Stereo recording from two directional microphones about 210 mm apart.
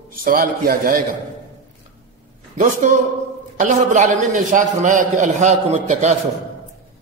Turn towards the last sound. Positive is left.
turn(degrees=-35)  # may be behind; listen again after turning